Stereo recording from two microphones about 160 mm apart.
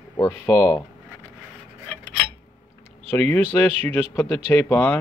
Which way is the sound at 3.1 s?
15° left (ahead or behind).